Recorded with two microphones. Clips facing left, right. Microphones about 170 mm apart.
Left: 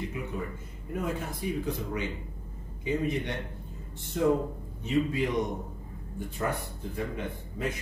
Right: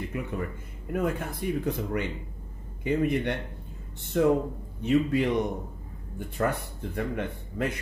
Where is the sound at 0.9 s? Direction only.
55° right (ahead or behind).